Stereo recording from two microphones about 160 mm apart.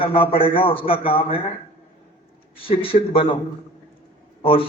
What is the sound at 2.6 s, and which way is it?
Speech, 35° left (ahead or behind).